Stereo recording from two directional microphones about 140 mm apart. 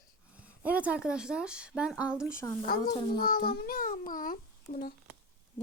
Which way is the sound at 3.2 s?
90° left.